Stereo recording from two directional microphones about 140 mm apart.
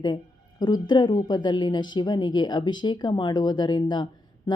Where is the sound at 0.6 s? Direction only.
30° left (ahead or behind).